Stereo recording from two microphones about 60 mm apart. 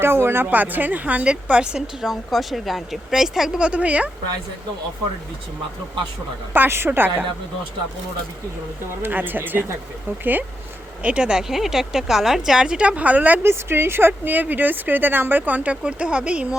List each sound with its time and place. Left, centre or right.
0.0 s a woman's voice: right; by 3.7 s centre
3.7 s speech: right
6.5 s a woman's voice: right
9.0 s a woman's voice: right
11.0 s a woman's voice: centre
13.4 s a woman's voice: right
14.1 s speech: right